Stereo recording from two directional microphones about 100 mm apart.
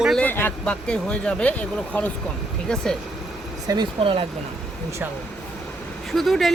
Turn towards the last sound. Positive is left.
turn(degrees=0)  # may be behind; listen again after turning